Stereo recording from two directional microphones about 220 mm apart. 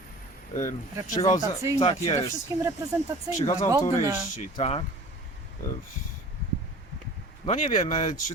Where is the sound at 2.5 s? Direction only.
15° right (ahead or behind).